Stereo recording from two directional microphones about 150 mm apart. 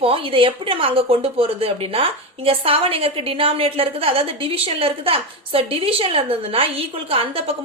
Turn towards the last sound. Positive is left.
turn(degrees=-40)  # may be behind; listen again after turning